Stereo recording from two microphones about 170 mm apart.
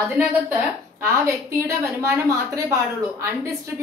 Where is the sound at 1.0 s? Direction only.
15° right (ahead or behind).